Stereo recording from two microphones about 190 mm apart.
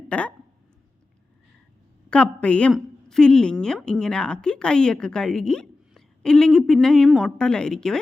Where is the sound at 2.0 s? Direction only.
5° left (ahead or behind).